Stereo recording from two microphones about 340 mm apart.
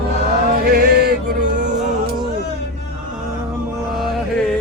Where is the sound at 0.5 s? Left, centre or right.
Right.